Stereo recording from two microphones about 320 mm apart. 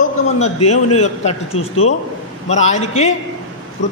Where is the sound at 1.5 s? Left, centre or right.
Left.